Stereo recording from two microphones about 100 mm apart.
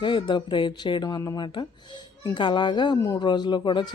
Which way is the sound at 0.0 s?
50° left (ahead or behind).